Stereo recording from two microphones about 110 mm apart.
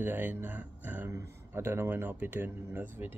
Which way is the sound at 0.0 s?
20° right (ahead or behind).